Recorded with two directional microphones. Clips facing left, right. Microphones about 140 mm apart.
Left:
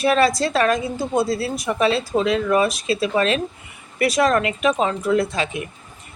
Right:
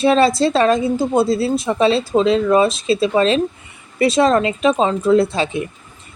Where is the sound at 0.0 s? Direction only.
25° right (ahead or behind).